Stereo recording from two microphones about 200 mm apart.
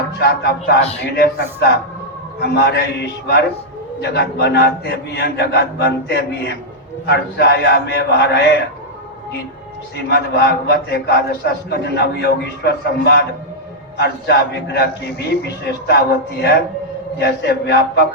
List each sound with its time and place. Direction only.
0.2 s a man's voice: 55° left (ahead or behind)
10.1 s a man's voice: 55° left (ahead or behind)